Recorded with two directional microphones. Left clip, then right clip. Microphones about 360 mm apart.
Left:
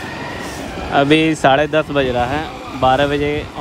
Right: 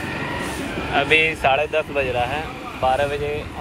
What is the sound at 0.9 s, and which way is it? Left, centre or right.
Speech, left.